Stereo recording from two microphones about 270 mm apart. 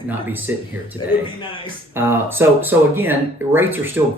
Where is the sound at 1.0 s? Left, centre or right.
Centre.